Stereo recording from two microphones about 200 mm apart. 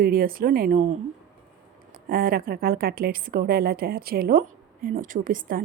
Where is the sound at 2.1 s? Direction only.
45° right (ahead or behind).